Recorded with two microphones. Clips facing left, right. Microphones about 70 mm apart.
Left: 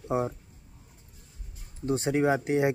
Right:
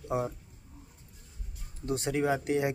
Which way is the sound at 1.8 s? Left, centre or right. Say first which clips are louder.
Left 4 dB; left.